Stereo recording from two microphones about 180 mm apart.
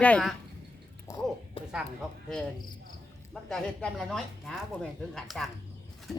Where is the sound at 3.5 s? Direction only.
Centre (ahead or behind).